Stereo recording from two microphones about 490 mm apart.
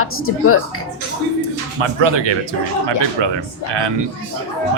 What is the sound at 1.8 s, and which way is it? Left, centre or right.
Speech, right.